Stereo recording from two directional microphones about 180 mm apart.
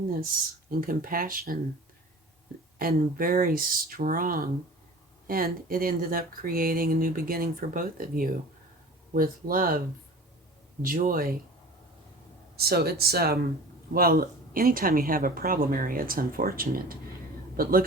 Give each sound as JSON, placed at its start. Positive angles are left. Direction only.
{"t": 0.2, "sound": "speech", "side_deg": -55}
{"t": 2.7, "sound": "speech", "side_deg": -50}
{"t": 10.8, "sound": "speech", "side_deg": -50}
{"t": 12.5, "sound": "speech", "side_deg": -60}